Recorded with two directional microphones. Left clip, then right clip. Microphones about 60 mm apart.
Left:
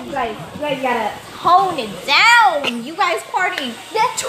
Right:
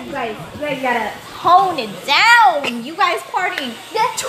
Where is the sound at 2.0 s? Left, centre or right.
Right.